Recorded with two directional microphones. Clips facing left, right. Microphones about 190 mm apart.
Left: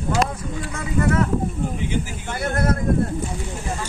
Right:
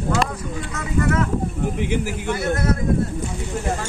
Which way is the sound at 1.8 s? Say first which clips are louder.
Right 3 dB; 65° right (ahead or behind).